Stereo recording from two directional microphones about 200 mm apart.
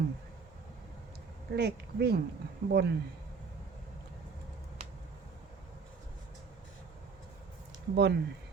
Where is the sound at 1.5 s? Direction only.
55° right (ahead or behind).